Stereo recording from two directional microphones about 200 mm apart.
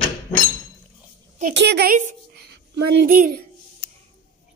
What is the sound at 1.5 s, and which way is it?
Speech, 60° right (ahead or behind).